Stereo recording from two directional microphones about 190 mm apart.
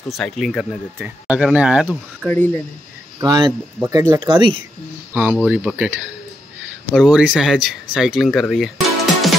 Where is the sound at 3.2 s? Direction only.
20° right (ahead or behind).